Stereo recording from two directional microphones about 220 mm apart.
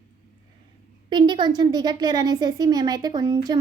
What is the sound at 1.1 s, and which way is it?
A woman's voice, 20° right (ahead or behind).